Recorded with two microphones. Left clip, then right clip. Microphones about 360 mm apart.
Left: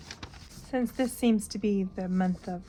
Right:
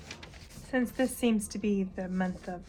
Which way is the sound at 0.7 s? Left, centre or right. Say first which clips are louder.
Even; left.